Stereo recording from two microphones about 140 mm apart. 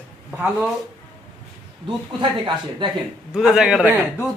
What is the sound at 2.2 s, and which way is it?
Speech, 35° right (ahead or behind).